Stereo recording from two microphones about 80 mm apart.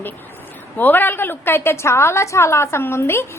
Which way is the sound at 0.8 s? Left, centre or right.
Left.